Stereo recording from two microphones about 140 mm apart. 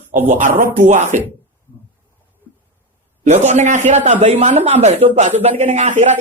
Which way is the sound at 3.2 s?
55° right (ahead or behind).